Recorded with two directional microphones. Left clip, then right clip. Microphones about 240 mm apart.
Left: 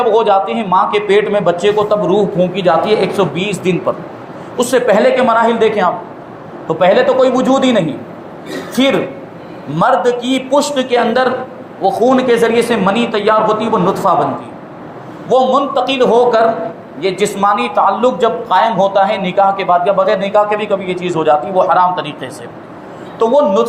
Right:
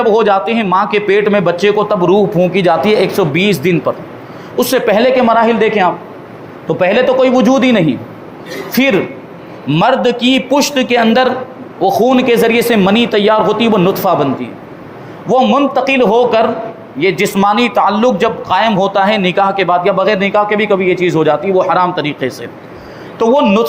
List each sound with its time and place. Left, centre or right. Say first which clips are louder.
0.0 s a man's voice: right 1 dB; right
15.5 s a man's voice: right 2 dB; right